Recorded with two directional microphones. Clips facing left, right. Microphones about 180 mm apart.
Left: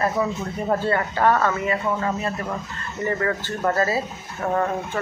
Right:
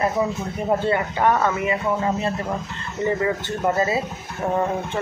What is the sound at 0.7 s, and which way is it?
Speech, 15° right (ahead or behind).